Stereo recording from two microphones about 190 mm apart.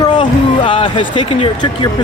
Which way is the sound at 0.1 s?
25° left (ahead or behind).